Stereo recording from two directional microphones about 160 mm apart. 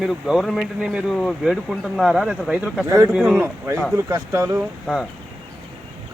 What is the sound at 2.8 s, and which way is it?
Speech, 15° right (ahead or behind).